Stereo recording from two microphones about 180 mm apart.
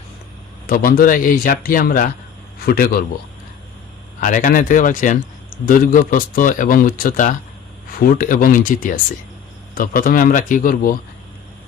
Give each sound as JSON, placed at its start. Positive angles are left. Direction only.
{"t": 0.7, "sound": "a man's voice", "side_deg": 50}
{"t": 4.2, "sound": "a man's voice", "side_deg": 50}